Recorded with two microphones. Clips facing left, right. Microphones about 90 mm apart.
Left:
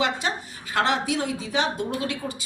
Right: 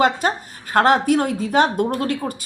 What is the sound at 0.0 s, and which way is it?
A woman's voice, 45° right (ahead or behind).